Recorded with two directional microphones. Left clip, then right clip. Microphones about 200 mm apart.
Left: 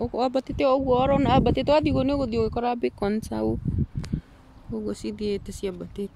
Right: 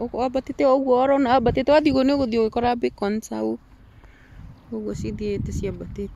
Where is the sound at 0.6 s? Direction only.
20° right (ahead or behind).